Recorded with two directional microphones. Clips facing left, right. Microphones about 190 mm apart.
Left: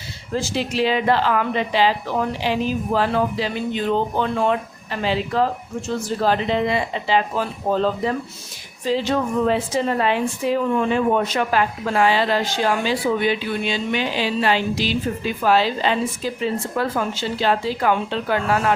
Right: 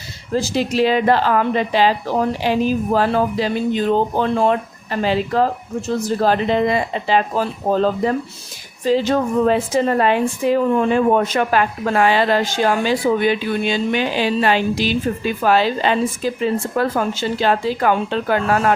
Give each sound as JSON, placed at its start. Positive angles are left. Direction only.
{"t": 0.3, "sound": "a woman's voice", "side_deg": -40}